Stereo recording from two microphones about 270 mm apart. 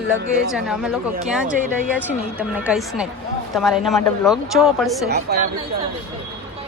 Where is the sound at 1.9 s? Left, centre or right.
Centre.